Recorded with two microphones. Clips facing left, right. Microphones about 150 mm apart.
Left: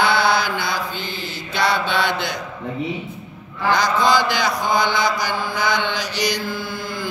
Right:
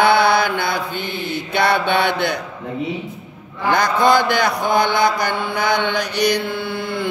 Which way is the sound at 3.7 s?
55° right (ahead or behind).